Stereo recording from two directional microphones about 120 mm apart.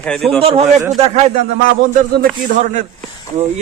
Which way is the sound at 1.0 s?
65° right (ahead or behind).